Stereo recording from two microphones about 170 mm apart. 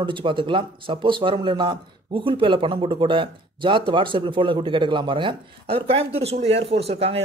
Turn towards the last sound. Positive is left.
turn(degrees=-35)  # may be behind; listen again after turning